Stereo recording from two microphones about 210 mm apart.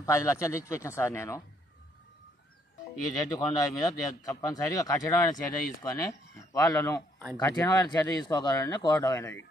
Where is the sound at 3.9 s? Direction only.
15° left (ahead or behind).